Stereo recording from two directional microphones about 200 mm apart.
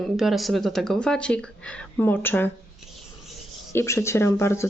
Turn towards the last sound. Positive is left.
turn(degrees=15)  # may be behind; listen again after turning